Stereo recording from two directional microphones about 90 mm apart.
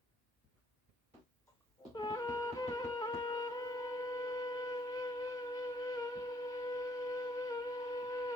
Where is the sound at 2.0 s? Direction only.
45° left (ahead or behind).